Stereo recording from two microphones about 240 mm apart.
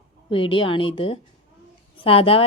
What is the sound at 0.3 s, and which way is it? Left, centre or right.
Speech, left.